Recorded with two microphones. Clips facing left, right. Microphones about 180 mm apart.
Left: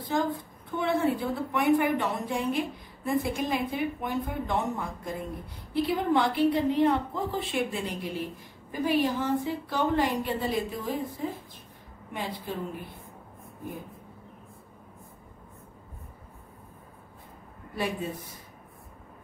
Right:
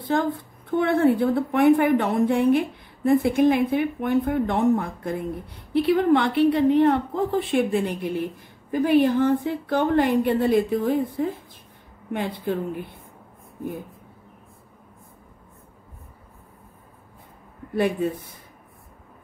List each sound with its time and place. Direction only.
0.1 s a woman's voice: 60° right (ahead or behind)
17.7 s a woman's voice: 55° right (ahead or behind)